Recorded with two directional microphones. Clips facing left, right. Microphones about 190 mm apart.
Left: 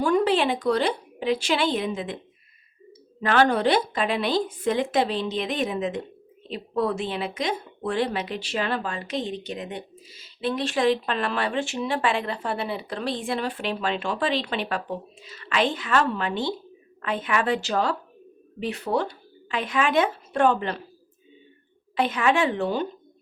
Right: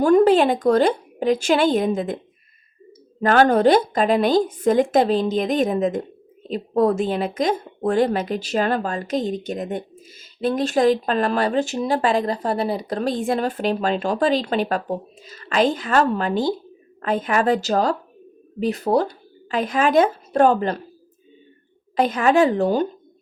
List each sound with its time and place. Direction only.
0.0 s speech: 45° right (ahead or behind)
3.2 s a woman's voice: 45° right (ahead or behind)
21.9 s a woman's voice: 40° right (ahead or behind)